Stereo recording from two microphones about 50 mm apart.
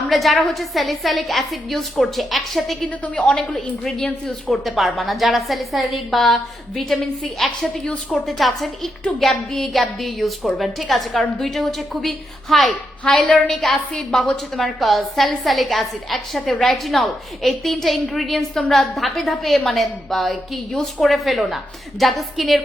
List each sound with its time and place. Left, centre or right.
0.1 s a woman's voice: centre
3.2 s a woman's voice: centre
4.5 s a woman's voice: centre